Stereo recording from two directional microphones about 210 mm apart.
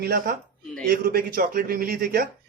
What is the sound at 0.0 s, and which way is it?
Speech, 50° right (ahead or behind).